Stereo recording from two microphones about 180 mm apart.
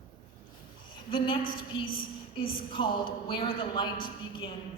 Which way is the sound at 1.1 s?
30° left (ahead or behind).